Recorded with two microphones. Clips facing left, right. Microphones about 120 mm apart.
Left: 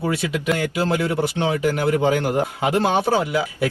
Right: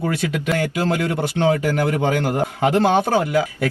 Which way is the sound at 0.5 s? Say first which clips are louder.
Right 1 dB; 15° left (ahead or behind).